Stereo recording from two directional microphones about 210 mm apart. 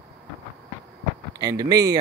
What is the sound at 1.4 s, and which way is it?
Speech, 20° right (ahead or behind).